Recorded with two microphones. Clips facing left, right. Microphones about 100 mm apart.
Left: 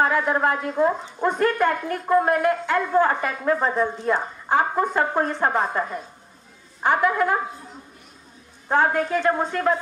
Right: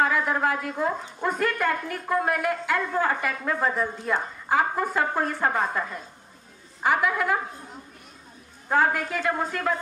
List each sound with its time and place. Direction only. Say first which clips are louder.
0.0 s a woman's voice: left 3 dB; 40° left (ahead or behind)
8.6 s a woman's voice: left 3 dB; 35° left (ahead or behind)